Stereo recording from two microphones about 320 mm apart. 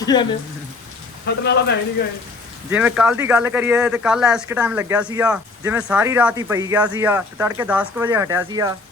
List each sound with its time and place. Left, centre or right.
0.0 s speech: centre
1.2 s speech: left
2.6 s speech: centre